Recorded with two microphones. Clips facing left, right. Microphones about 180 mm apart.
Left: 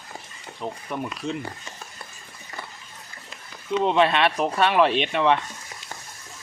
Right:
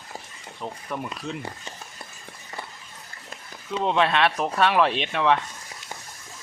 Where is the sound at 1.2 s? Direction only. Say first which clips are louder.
Left 6 dB; 5° right (ahead or behind).